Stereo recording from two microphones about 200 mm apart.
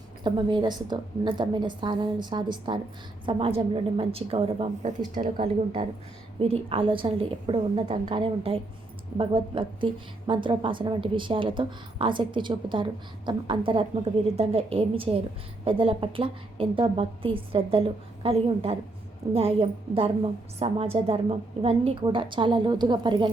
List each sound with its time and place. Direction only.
0.3 s a woman's voice: 25° right (ahead or behind)